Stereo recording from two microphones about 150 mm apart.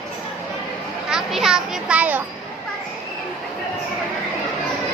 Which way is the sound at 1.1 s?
5° right (ahead or behind).